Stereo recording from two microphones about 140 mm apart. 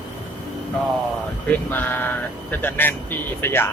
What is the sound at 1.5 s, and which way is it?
Speech, 15° left (ahead or behind).